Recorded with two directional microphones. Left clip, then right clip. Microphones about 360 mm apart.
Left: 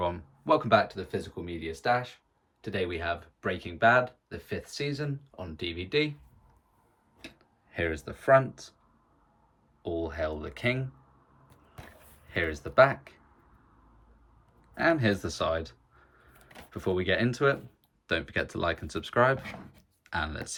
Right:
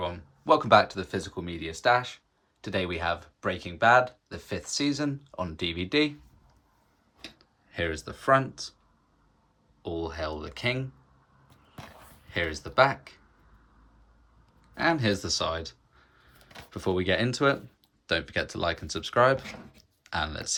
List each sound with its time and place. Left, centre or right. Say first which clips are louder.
0.0 s speech: left 2 dB; centre
7.3 s speech: right 1 dB; centre
9.8 s speech: left 1 dB; centre
12.3 s speech: even; centre
14.8 s speech: even; centre